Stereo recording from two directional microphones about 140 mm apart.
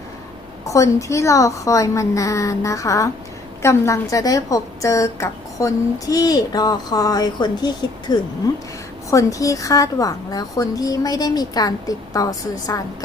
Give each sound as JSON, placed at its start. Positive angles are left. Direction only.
{"t": 0.7, "sound": "a woman's voice", "side_deg": 20}